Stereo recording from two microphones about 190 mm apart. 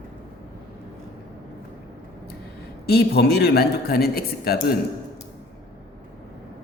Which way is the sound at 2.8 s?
55° left (ahead or behind).